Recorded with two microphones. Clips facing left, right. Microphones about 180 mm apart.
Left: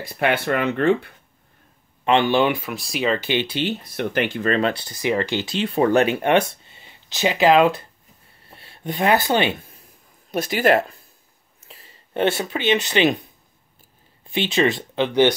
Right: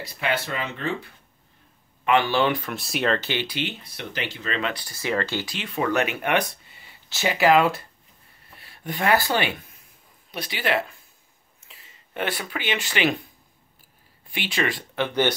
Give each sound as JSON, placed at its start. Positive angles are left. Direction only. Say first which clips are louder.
{"t": 0.0, "sound": "speech", "louder": "left 6 dB", "side_deg": 55}
{"t": 2.0, "sound": "speech", "louder": "left 3 dB", "side_deg": 25}
{"t": 2.7, "sound": "speech", "louder": "left 2 dB", "side_deg": 0}
{"t": 3.2, "sound": "speech", "louder": "left 5 dB", "side_deg": 20}
{"t": 3.7, "sound": "speech", "louder": "left 11 dB", "side_deg": 45}
{"t": 4.6, "sound": "speech", "louder": "left 7 dB", "side_deg": 35}
{"t": 4.8, "sound": "speech", "louder": "left 4 dB", "side_deg": 20}
{"t": 10.3, "sound": "speech", "louder": "left 8 dB", "side_deg": 45}